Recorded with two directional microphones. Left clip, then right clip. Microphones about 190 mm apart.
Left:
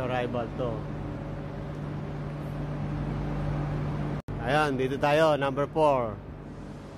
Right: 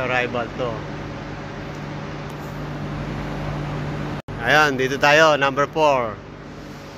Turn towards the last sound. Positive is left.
turn(degrees=15)  # may be behind; listen again after turning